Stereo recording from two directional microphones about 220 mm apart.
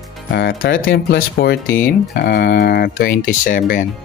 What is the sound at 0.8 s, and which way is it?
Speech, 45° left (ahead or behind).